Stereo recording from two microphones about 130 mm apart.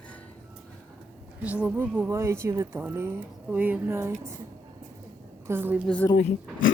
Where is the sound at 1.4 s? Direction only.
10° right (ahead or behind).